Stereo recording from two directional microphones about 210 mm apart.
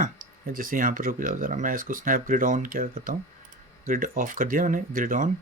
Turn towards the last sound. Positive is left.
turn(degrees=-40)  # may be behind; listen again after turning